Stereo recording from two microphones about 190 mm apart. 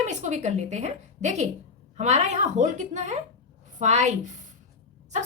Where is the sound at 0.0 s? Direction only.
40° right (ahead or behind).